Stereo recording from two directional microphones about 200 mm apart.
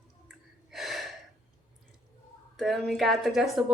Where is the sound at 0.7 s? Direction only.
Centre (ahead or behind).